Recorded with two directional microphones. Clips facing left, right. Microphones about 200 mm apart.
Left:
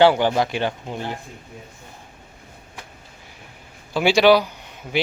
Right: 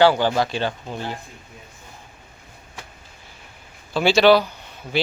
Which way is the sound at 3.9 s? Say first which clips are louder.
Even; 15° left (ahead or behind).